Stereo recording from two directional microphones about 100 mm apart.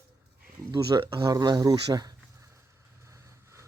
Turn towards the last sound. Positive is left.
turn(degrees=-30)  # may be behind; listen again after turning